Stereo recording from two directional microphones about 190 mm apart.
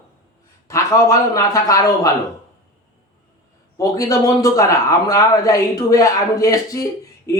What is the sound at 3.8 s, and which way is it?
A man's voice, 20° left (ahead or behind).